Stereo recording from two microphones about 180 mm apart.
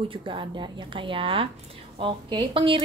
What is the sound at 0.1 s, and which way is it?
A woman's voice, 30° right (ahead or behind).